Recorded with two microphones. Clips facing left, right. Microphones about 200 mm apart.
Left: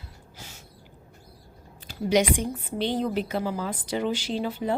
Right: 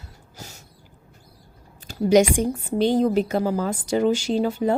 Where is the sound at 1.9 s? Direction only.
45° right (ahead or behind).